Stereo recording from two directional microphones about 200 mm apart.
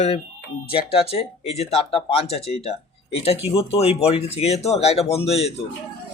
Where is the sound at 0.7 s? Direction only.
30° left (ahead or behind).